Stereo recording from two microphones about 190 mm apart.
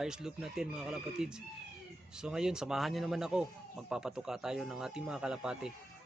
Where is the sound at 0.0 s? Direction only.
5° right (ahead or behind).